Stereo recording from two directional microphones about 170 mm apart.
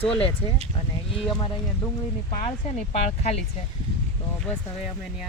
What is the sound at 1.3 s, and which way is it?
Speech, 25° left (ahead or behind).